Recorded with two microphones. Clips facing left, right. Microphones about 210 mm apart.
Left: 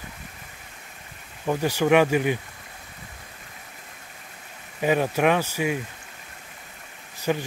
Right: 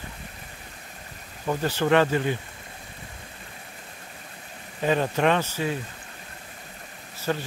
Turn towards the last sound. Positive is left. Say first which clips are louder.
# left 2 dB
turn(degrees=15)  # may be behind; listen again after turning